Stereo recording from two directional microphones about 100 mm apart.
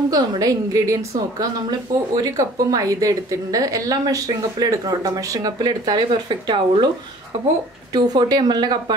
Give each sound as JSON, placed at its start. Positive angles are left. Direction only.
{"t": 0.1, "sound": "a woman's voice", "side_deg": -40}
{"t": 2.1, "sound": "a woman's voice", "side_deg": -35}
{"t": 7.9, "sound": "a woman's voice", "side_deg": -40}